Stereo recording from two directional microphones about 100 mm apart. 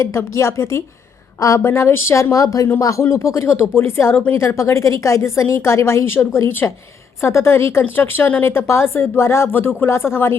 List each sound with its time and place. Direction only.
0.0 s a woman's voice: 30° left (ahead or behind)